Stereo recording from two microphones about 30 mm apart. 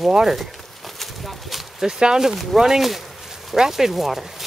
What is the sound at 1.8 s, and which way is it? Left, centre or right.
Speech, right.